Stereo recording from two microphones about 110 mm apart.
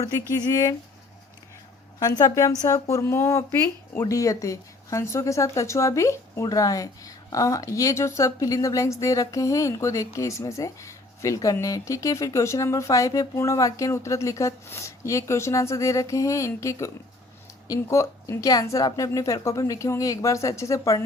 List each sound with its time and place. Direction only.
0.4 s a woman's voice: 30° left (ahead or behind)
2.0 s a woman's voice: 35° left (ahead or behind)